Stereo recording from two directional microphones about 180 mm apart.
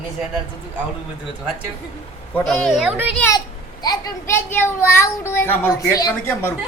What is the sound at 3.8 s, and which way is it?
A child's voice, 20° left (ahead or behind).